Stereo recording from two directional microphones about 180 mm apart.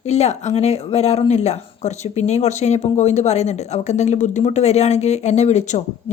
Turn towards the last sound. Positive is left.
turn(degrees=40)  # may be behind; listen again after turning